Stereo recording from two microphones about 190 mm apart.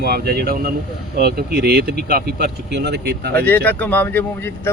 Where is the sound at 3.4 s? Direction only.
10° left (ahead or behind).